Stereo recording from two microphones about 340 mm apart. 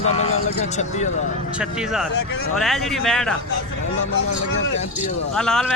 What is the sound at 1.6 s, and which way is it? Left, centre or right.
Speech, centre.